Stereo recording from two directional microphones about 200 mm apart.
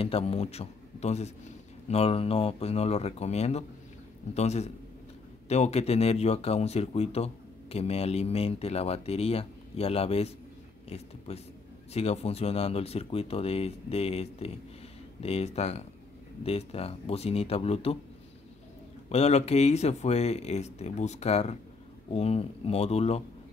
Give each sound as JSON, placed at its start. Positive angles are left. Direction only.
{"t": 0.0, "sound": "speech", "side_deg": 30}
{"t": 19.0, "sound": "speech", "side_deg": 30}